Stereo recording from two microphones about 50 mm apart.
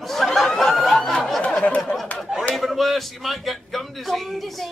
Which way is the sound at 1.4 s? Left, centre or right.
Left.